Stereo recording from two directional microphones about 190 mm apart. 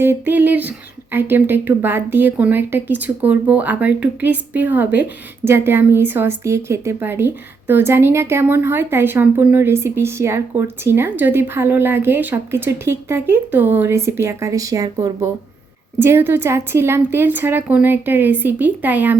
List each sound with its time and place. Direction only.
0.0 s speech: 10° right (ahead or behind)